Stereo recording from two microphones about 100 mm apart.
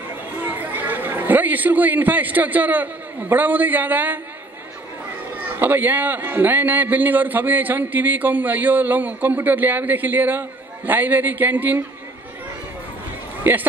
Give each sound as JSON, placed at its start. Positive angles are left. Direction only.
{"t": 0.5, "sound": "a man's voice", "side_deg": -20}
{"t": 5.6, "sound": "a man's voice", "side_deg": -20}
{"t": 13.5, "sound": "a man's voice", "side_deg": -20}